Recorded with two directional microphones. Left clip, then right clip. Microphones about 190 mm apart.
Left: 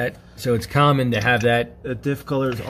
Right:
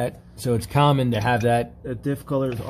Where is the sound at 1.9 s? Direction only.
40° left (ahead or behind).